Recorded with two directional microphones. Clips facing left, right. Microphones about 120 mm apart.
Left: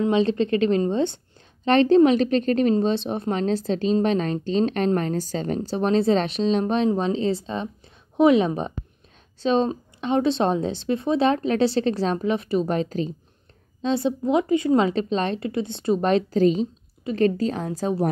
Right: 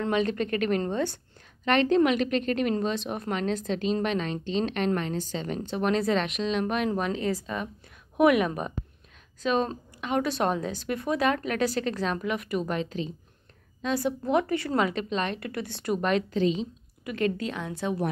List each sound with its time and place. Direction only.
0.1 s a woman's voice: 25° left (ahead or behind)
13.8 s a woman's voice: 25° left (ahead or behind)